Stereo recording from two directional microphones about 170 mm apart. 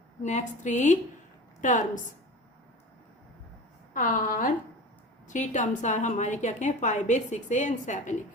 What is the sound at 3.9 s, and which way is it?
A woman's voice, 50° left (ahead or behind).